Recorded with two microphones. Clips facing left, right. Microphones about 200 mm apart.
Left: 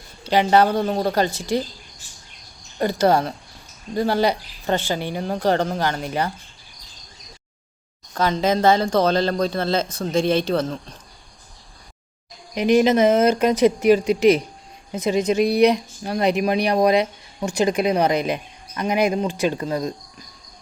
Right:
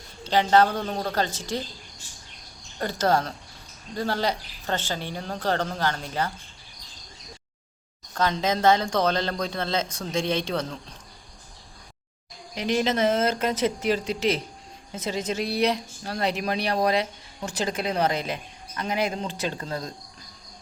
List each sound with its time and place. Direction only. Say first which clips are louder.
0.3 s a woman's voice: left 3 dB; 10° left (ahead or behind)
2.7 s a woman's voice: left 6 dB; 15° left (ahead or behind)
8.4 s a woman's voice: left 4 dB; 10° left (ahead or behind)
12.5 s a woman's voice: left 8 dB; 15° left (ahead or behind)